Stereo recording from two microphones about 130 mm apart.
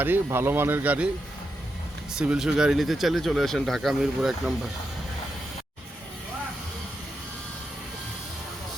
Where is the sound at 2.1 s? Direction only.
5° right (ahead or behind).